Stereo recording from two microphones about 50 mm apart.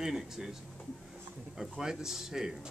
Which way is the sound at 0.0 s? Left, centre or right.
Centre.